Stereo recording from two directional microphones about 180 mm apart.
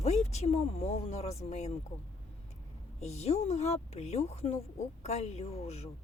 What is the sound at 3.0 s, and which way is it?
A woman's voice, 35° left (ahead or behind).